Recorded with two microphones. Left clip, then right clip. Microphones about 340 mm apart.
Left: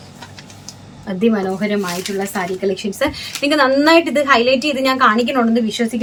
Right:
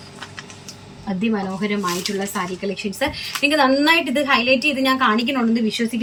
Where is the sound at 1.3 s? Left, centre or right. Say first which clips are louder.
Left 3 dB; centre.